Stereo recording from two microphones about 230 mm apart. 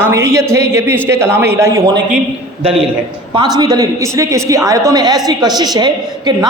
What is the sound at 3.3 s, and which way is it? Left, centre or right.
A woman's voice, centre.